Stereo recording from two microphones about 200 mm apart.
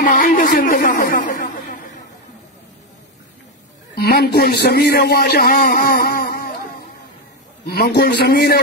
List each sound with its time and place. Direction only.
0.0 s a sound: 45° left (ahead or behind)
3.9 s a man's voice: 50° left (ahead or behind)
7.6 s a man's voice: 50° left (ahead or behind)